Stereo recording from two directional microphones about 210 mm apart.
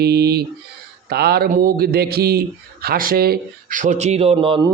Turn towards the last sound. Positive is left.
turn(degrees=-25)  # may be behind; listen again after turning